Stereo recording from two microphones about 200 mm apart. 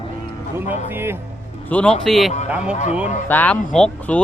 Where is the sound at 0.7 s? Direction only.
10° right (ahead or behind).